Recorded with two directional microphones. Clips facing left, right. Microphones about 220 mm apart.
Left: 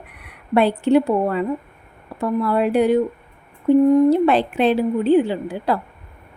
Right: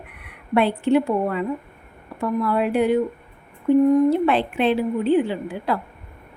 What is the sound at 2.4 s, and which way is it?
Speech, 35° left (ahead or behind).